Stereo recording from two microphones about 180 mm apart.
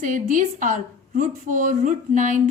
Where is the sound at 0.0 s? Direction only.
45° right (ahead or behind).